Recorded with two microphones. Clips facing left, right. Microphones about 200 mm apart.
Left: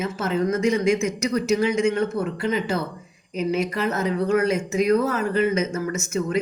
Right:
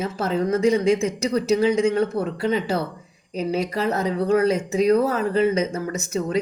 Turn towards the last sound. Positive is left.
turn(degrees=-35)  # may be behind; listen again after turning